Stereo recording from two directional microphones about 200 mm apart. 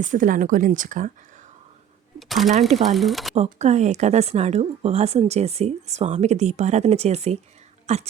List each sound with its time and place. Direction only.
0.0 s speech: 40° right (ahead or behind)
2.1 s a sound: centre (ahead or behind)
2.5 s speech: 35° right (ahead or behind)
2.9 s speech: centre (ahead or behind)
3.3 s speech: 35° right (ahead or behind)